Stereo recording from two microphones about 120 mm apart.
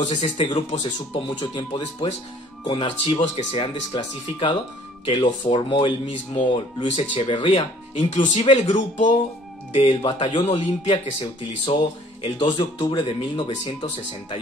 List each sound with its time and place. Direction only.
0.0 s speech: 75° left (ahead or behind)
0.4 s speech: 45° left (ahead or behind)
7.9 s speech: 65° left (ahead or behind)
9.8 s speech: 45° left (ahead or behind)